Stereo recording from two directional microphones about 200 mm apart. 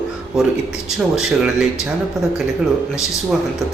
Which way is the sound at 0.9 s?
5° right (ahead or behind).